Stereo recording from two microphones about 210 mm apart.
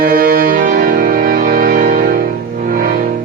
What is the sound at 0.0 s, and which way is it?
Music, 45° right (ahead or behind).